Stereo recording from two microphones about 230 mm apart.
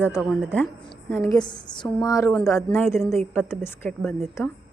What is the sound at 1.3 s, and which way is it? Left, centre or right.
A woman's voice, centre.